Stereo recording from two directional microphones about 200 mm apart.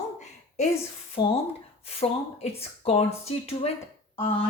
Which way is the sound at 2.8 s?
30° left (ahead or behind).